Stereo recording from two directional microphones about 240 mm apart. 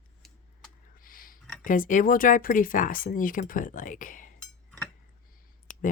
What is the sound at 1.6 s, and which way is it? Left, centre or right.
Speech, left.